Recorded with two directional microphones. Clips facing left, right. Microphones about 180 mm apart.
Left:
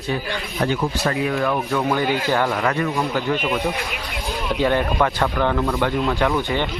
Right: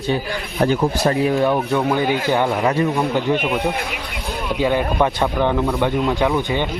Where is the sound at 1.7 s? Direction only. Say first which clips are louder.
Right 2 dB; 15° right (ahead or behind).